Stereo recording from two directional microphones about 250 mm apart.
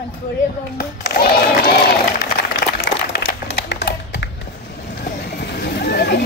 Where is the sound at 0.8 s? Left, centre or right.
Left.